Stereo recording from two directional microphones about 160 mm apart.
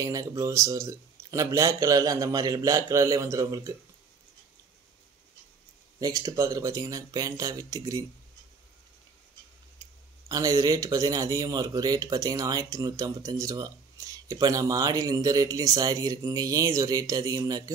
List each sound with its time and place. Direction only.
0.0 s speech: 20° right (ahead or behind)
5.9 s speech: 20° right (ahead or behind)
9.8 s speech: 20° right (ahead or behind)